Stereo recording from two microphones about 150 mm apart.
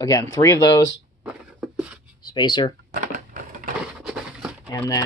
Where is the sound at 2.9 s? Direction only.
60° right (ahead or behind).